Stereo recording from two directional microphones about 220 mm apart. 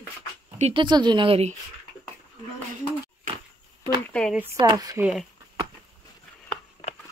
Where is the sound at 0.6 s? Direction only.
25° right (ahead or behind).